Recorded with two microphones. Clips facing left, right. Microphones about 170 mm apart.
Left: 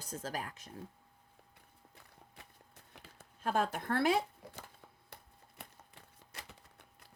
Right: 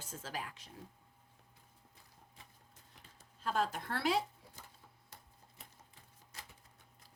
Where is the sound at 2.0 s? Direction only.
65° left (ahead or behind).